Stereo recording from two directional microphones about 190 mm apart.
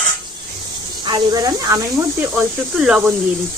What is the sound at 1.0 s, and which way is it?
Speech, 20° right (ahead or behind).